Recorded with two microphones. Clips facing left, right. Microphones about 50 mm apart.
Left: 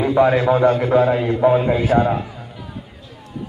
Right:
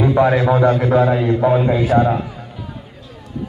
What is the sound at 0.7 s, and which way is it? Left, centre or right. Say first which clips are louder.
A man's voice: right 1 dB; centre.